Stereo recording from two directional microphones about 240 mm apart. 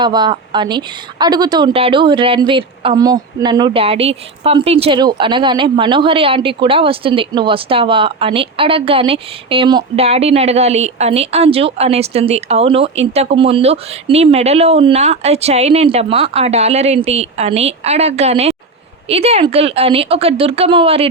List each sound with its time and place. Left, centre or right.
0.0 s speech: centre